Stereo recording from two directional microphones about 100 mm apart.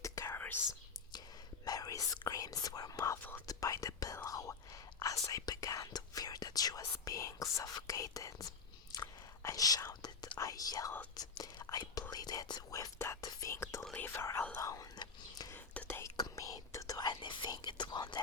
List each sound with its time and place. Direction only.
0.3 s whispering: 20° left (ahead or behind)
1.6 s whispering: 40° left (ahead or behind)
13.2 s whispering: 30° left (ahead or behind)
14.6 s whispering: 35° left (ahead or behind)
15.5 s whispering: 15° left (ahead or behind)
15.9 s whispering: 25° left (ahead or behind)
16.1 s whispering: 35° left (ahead or behind)